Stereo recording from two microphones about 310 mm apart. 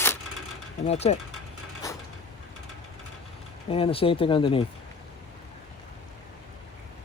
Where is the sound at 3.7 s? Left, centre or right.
Centre.